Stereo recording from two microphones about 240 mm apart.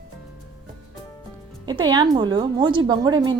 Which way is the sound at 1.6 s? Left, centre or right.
Centre.